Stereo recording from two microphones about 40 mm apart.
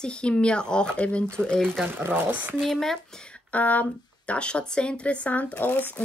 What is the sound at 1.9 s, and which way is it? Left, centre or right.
Speech, right.